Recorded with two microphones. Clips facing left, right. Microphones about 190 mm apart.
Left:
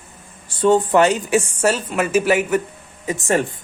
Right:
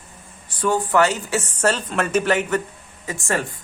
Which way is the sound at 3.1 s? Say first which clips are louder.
Left 5 dB; 20° left (ahead or behind).